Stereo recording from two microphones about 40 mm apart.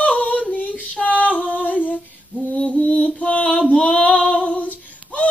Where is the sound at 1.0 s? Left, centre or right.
Left.